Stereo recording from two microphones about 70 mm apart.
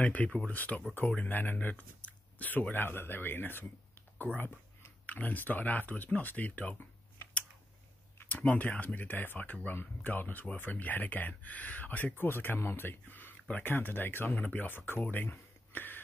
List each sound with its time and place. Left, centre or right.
0.0 s speech: centre
5.0 s speech: left
8.2 s speech: left